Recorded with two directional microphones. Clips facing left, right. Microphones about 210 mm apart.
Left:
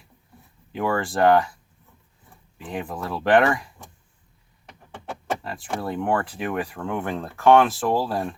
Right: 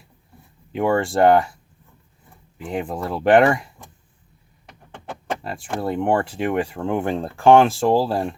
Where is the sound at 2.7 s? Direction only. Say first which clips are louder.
Right 4 dB; 25° right (ahead or behind).